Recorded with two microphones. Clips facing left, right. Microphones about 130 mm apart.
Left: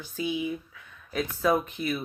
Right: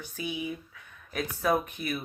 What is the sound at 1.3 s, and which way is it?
Speech, 55° right (ahead or behind).